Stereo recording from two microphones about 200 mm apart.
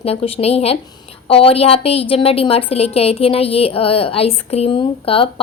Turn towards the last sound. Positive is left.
turn(degrees=25)  # may be behind; listen again after turning